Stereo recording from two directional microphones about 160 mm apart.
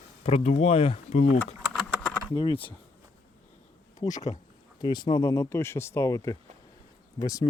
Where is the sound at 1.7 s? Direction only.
10° left (ahead or behind).